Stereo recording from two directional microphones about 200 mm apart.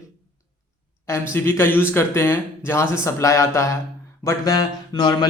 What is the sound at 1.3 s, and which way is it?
A man's voice, 10° left (ahead or behind).